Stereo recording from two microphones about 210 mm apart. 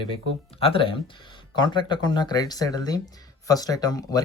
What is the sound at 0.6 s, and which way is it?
Speech, 25° left (ahead or behind).